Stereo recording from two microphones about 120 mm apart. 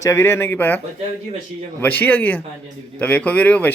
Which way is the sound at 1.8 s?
15° left (ahead or behind).